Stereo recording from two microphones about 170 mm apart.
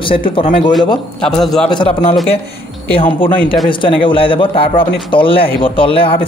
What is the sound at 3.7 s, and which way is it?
A man's voice, 30° left (ahead or behind).